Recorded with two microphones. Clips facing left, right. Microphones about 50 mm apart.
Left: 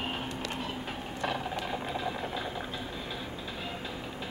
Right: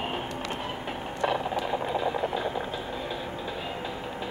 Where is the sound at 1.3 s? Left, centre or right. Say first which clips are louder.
Right 5 dB; centre.